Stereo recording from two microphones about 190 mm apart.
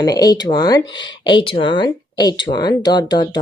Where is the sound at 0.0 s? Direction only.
20° left (ahead or behind).